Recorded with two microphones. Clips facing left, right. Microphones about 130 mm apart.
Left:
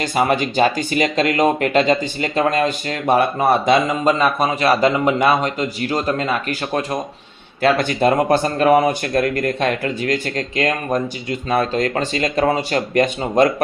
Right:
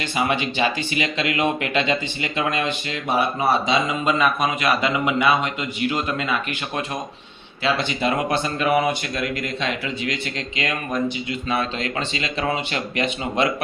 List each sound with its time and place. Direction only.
0.0 s speech: 40° left (ahead or behind)